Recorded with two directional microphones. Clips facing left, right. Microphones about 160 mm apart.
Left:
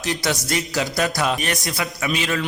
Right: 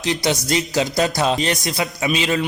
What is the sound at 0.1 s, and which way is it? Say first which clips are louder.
Speech: right 3 dB; 20° right (ahead or behind).